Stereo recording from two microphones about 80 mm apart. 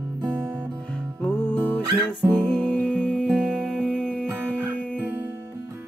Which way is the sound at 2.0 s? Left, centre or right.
Centre.